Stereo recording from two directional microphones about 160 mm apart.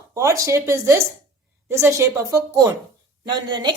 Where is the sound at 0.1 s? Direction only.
20° right (ahead or behind).